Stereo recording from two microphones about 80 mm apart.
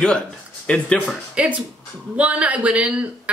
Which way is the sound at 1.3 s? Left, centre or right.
Centre.